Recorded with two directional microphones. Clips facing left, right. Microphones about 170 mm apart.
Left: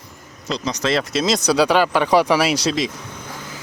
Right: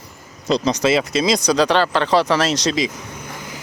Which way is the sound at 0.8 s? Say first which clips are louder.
Right 3 dB; 5° right (ahead or behind).